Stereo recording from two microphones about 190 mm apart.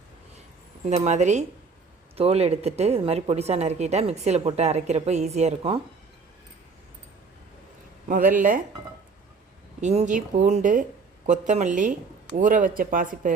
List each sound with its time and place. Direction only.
0.9 s speech: 35° right (ahead or behind)
8.0 s speech: 45° right (ahead or behind)
9.8 s speech: 35° right (ahead or behind)